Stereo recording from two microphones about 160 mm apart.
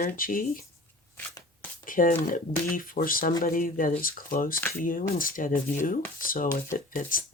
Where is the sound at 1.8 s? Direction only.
60° left (ahead or behind).